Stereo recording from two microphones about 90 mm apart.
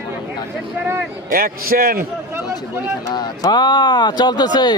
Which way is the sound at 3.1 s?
55° left (ahead or behind).